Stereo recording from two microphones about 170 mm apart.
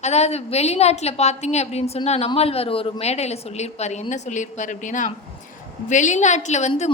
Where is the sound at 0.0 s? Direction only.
40° left (ahead or behind).